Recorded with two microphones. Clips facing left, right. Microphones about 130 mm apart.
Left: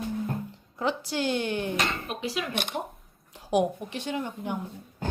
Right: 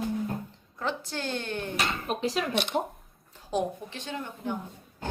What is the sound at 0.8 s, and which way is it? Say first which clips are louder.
Speech: left 4 dB; 10° left (ahead or behind).